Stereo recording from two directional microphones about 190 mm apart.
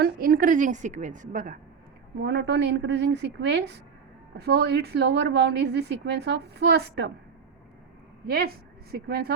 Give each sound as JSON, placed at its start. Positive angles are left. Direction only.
{"t": 0.0, "sound": "a woman's voice", "side_deg": -50}
{"t": 2.2, "sound": "a woman's voice", "side_deg": -65}
{"t": 8.9, "sound": "a woman's voice", "side_deg": -55}